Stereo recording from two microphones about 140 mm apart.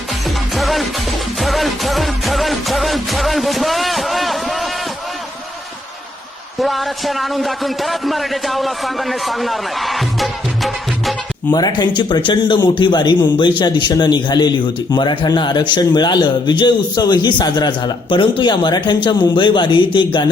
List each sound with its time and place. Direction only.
0.1 s music: centre (ahead or behind)
6.6 s a man's voice: centre (ahead or behind)
11.5 s speech: 30° left (ahead or behind)